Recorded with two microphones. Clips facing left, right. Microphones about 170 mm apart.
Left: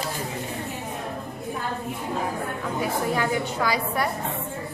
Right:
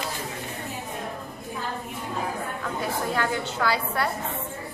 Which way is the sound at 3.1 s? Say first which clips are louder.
Left 2 dB; 10° left (ahead or behind).